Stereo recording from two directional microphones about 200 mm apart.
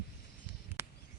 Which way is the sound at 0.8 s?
10° right (ahead or behind).